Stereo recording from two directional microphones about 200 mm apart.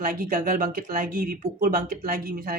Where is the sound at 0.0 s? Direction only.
45° right (ahead or behind).